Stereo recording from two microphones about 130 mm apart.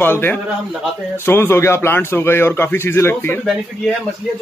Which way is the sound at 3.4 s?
Centre (ahead or behind).